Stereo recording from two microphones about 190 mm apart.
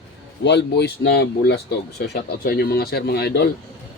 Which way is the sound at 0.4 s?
65° left (ahead or behind).